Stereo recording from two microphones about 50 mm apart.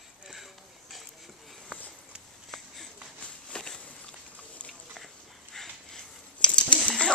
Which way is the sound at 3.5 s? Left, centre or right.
Centre.